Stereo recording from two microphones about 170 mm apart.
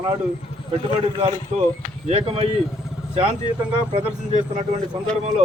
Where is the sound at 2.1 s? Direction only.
35° right (ahead or behind).